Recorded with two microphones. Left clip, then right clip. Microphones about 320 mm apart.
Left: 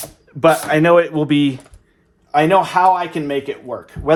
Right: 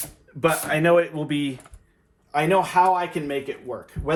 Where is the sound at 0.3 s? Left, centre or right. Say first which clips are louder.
Left 9 dB; left.